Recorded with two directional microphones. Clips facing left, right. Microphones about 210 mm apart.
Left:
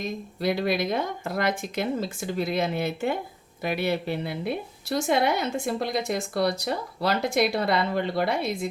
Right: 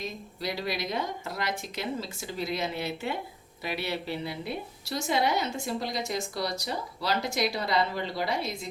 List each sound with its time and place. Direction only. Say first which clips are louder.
0.0 s a woman's voice: left 7 dB; 55° left (ahead or behind)